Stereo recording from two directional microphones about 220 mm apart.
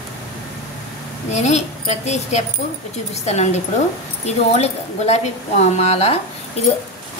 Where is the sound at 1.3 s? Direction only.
30° left (ahead or behind).